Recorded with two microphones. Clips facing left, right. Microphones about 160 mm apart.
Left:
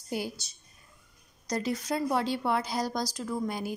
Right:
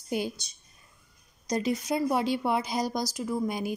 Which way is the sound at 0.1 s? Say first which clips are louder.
Right 3 dB; 20° right (ahead or behind).